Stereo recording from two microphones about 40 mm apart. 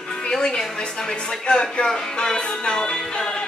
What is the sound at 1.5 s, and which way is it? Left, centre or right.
Speech, left.